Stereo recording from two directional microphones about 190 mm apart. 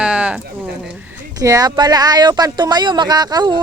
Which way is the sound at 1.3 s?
20° right (ahead or behind).